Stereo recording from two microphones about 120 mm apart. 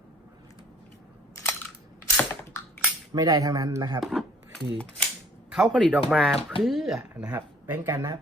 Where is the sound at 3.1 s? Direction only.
30° right (ahead or behind).